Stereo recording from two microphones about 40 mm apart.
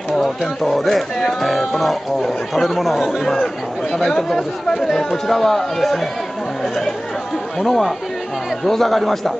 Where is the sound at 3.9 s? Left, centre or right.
Centre.